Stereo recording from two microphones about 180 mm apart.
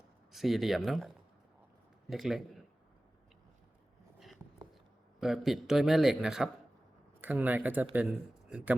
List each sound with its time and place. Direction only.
0.3 s a man's voice: centre (ahead or behind)
5.2 s a man's voice: centre (ahead or behind)